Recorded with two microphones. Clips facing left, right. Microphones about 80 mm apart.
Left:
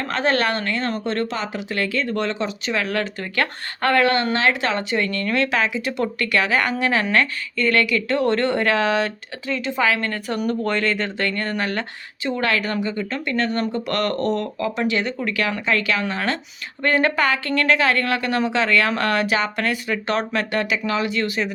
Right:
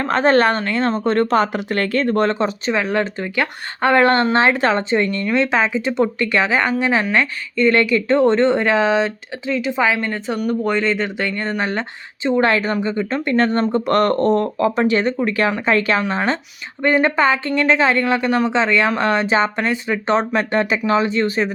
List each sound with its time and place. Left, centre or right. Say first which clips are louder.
0.0 s speech: right 6 dB; right
1.0 s speech: right 8 dB; right
2.7 s speech: right 1 dB; right
3.3 s speech: even; centre
4.0 s speech: right 4 dB; right; by 10.3 s centre
10.3 s speech: right 3 dB; centre; by 13.2 s right
13.2 s speech: right 6 dB; right